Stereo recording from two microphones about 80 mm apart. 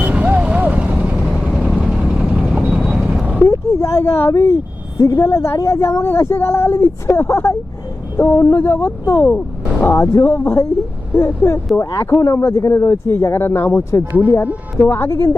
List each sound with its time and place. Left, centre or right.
0.0 s vehicle: centre
1.2 s vehicle: centre
3.5 s a sound: left
4.9 s speech: left